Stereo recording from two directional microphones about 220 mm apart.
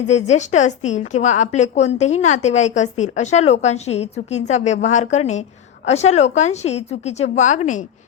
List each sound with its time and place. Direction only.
0.1 s a woman's voice: 30° left (ahead or behind)